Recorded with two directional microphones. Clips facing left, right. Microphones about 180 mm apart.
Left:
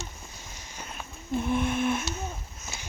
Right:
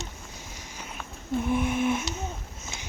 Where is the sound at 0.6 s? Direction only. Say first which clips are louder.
Left 1 dB; 10° right (ahead or behind).